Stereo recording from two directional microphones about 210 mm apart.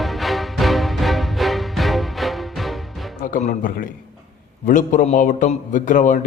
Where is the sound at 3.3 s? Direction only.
40° left (ahead or behind).